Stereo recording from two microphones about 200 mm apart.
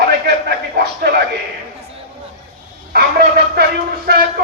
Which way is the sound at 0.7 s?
50° right (ahead or behind).